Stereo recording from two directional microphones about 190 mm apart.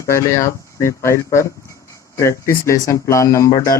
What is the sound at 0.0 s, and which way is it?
Speech, 15° left (ahead or behind).